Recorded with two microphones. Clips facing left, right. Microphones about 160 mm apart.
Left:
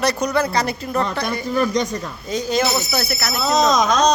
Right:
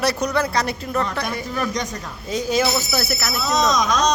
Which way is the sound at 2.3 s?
5° right (ahead or behind).